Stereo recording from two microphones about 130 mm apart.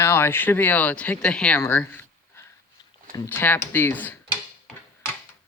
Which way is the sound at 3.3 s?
15° left (ahead or behind).